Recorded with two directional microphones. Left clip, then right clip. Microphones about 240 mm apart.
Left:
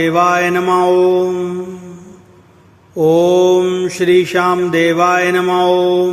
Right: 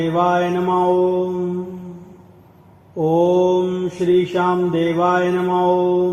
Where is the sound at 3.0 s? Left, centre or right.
Left.